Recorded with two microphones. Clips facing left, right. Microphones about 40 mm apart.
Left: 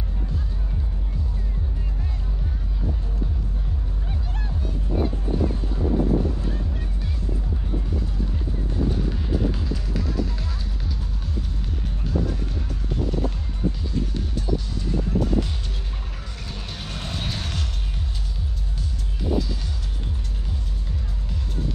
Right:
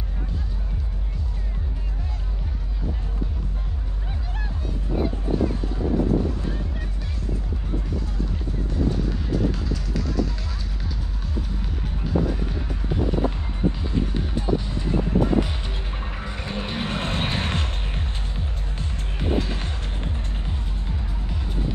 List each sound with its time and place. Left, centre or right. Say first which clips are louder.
12.1 s music: right 3 dB; centre; by 20.5 s right
20.8 s music: right 2 dB; right